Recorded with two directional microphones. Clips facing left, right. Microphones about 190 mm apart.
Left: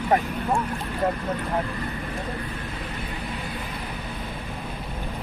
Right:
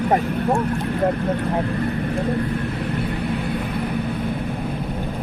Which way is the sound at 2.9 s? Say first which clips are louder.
Right 9 dB; 60° right (ahead or behind).